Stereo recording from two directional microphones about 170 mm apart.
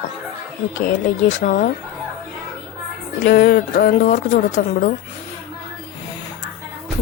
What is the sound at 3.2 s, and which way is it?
Speech, 75° left (ahead or behind).